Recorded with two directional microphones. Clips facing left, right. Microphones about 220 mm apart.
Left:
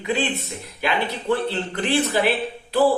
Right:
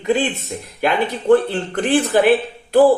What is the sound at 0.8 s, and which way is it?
A man's voice, 50° right (ahead or behind).